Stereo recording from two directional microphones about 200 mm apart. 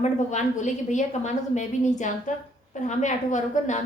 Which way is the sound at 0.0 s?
35° left (ahead or behind).